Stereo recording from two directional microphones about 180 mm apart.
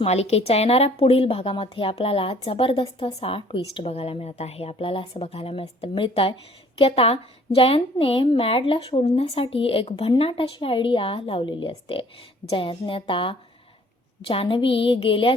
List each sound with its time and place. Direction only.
0.0 s a woman's voice: 35° left (ahead or behind)